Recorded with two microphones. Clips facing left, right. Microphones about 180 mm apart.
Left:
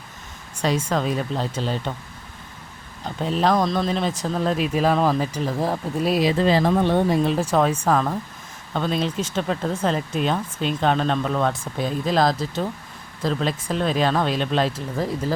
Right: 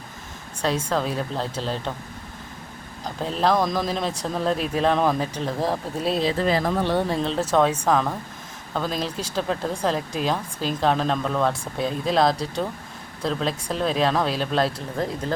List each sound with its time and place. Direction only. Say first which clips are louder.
0.7 s speech: left 2 dB; 10° left (ahead or behind)
3.2 s speech: left 1 dB; centre (ahead or behind)
6.4 s speech: left 4 dB; 25° left (ahead or behind); by 15.3 s 5° left (ahead or behind)